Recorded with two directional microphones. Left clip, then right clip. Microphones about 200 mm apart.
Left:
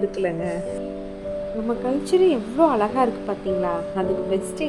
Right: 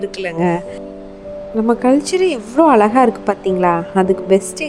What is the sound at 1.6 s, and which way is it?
A woman's voice, 35° right (ahead or behind).